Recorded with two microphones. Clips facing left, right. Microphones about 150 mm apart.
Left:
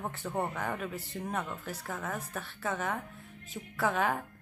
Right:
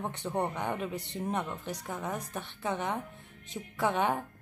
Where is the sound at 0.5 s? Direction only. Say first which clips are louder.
Right 2 dB; 20° right (ahead or behind).